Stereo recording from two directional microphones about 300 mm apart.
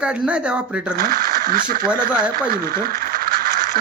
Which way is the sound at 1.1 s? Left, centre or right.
Right.